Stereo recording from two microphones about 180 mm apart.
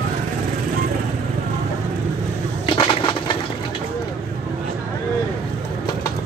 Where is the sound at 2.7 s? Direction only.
30° left (ahead or behind).